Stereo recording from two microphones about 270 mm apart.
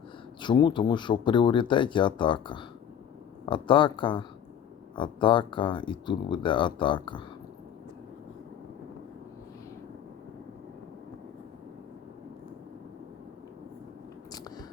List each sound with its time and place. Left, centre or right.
0.4 s speech: centre
14.3 s biting: centre